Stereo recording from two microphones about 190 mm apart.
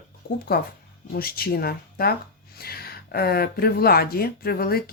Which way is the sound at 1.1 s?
50° left (ahead or behind).